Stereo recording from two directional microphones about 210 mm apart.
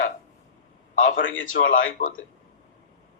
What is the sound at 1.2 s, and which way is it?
Speech, 65° left (ahead or behind).